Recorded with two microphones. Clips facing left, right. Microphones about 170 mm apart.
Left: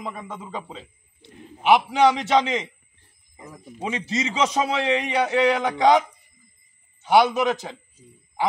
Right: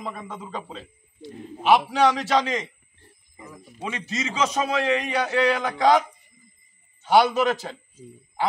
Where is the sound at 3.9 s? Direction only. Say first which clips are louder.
Left 3 dB; 30° left (ahead or behind).